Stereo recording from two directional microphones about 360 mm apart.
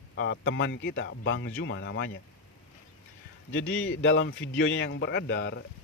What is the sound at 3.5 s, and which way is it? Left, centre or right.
Speech, left.